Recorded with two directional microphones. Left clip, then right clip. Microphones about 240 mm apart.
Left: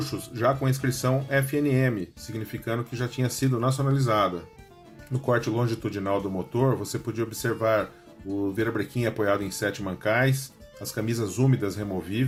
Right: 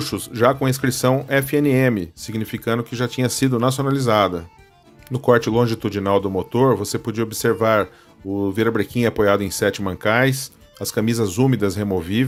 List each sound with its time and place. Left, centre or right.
0.0 s speech: right